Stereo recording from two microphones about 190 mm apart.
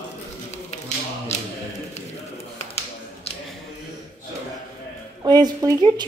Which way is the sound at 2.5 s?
35° left (ahead or behind).